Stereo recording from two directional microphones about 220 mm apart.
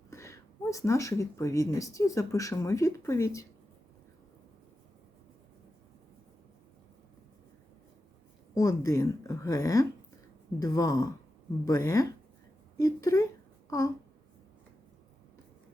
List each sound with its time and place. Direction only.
0.1 s speech: 15° left (ahead or behind)
8.5 s speech: 15° left (ahead or behind)
13.7 s a sound: 15° left (ahead or behind)